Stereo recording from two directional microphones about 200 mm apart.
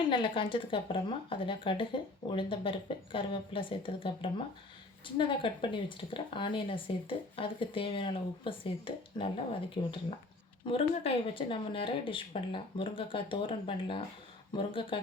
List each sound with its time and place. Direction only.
0.0 s speech: 25° left (ahead or behind)